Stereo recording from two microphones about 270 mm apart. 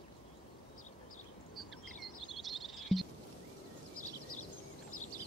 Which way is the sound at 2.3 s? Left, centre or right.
Centre.